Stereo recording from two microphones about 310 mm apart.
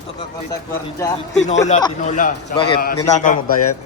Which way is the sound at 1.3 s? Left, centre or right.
Left.